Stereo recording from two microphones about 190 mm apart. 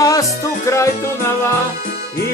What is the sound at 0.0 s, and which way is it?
Music, 20° left (ahead or behind).